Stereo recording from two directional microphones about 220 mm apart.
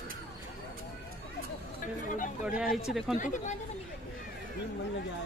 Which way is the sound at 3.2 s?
35° left (ahead or behind).